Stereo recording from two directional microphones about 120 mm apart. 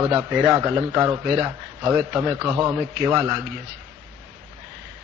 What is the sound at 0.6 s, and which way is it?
A man's voice, 20° right (ahead or behind).